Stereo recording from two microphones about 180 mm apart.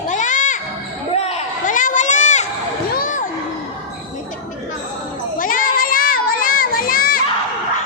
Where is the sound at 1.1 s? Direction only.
35° left (ahead or behind).